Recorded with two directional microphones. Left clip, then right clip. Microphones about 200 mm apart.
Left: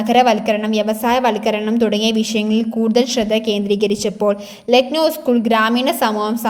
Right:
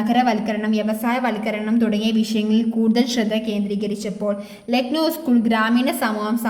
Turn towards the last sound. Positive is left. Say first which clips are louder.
# left 5 dB
turn(degrees=25)  # may be behind; listen again after turning